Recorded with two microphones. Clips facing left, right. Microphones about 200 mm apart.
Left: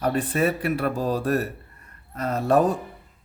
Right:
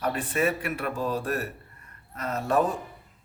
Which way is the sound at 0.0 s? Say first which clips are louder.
Left 4 dB; 35° left (ahead or behind).